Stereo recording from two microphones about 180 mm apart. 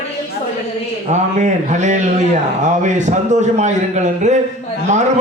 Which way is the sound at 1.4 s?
40° right (ahead or behind).